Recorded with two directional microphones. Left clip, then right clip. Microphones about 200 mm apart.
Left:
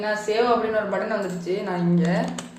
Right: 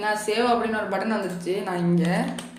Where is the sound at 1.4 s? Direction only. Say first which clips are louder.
Even; 35° right (ahead or behind).